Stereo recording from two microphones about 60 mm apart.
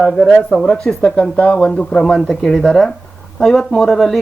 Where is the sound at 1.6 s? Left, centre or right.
Centre.